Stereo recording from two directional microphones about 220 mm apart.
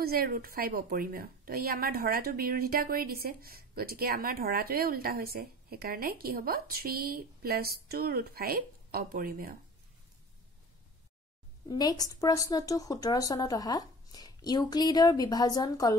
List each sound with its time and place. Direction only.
0.0 s a woman's voice: 45° right (ahead or behind)
11.7 s speech: 15° left (ahead or behind)